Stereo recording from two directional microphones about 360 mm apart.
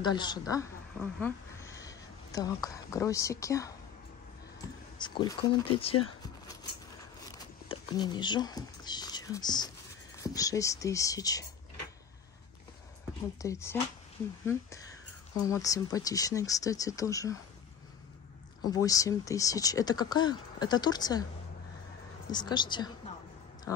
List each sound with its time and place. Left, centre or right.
0.0 s speech: centre
4.9 s speech: centre
7.2 s patter: centre
10.1 s speech: centre
13.4 s speech: centre
18.6 s speech: centre
22.3 s speech: centre